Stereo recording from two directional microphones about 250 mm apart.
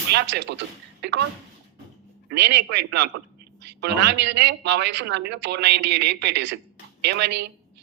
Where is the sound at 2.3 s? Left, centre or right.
Right.